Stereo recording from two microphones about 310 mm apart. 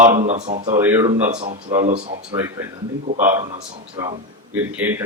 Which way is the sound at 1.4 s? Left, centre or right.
Right.